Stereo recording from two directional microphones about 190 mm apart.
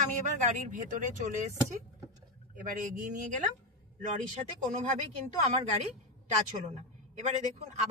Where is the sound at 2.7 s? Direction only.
40° right (ahead or behind).